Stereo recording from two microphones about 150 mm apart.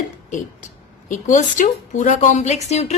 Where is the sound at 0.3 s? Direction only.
55° left (ahead or behind).